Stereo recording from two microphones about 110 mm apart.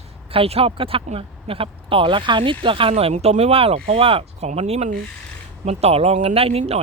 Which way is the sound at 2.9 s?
80° right.